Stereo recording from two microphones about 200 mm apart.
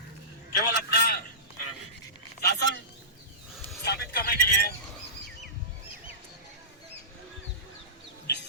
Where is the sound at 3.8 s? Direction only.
50° left (ahead or behind).